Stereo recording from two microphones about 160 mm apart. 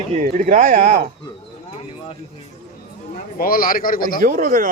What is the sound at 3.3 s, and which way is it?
Speech, 65° left (ahead or behind).